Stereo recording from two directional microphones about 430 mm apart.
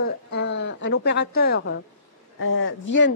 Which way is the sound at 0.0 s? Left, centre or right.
Left.